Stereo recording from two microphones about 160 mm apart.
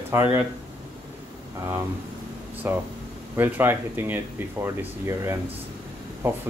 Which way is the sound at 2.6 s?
15° right (ahead or behind).